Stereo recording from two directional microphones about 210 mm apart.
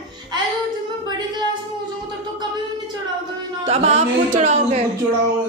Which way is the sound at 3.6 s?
30° right (ahead or behind).